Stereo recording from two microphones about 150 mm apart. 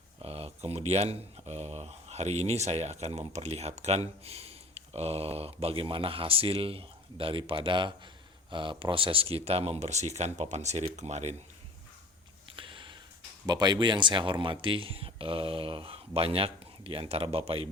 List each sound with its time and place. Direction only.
0.2 s speech: 40° right (ahead or behind)
12.5 s a sound: 35° right (ahead or behind)
13.4 s speech: 25° right (ahead or behind)